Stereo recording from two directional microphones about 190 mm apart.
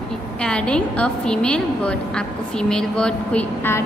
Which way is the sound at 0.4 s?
5° left (ahead or behind).